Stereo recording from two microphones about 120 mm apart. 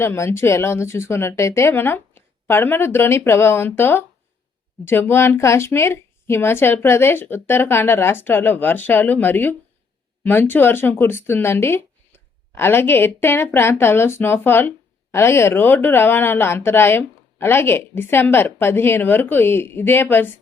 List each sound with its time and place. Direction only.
0.0 s a woman's voice: 20° left (ahead or behind)